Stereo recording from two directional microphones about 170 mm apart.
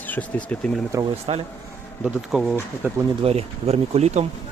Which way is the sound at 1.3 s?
35° right (ahead or behind).